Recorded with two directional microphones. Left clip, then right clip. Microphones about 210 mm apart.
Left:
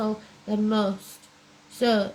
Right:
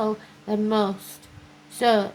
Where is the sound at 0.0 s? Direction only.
40° right (ahead or behind).